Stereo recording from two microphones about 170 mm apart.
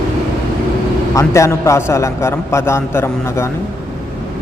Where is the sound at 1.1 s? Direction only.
15° left (ahead or behind).